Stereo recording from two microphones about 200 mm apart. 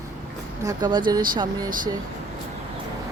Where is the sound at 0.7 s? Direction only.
20° right (ahead or behind).